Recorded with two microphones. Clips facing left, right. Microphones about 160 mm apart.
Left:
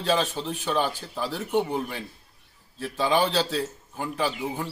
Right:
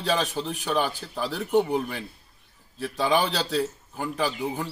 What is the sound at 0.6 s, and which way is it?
Speech, 10° right (ahead or behind).